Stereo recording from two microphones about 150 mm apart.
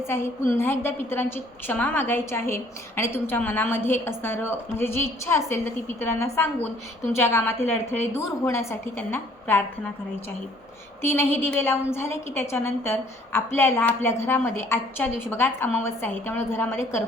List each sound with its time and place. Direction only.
0.1 s a woman's voice: 15° left (ahead or behind)
11.0 s a woman's voice: 15° left (ahead or behind)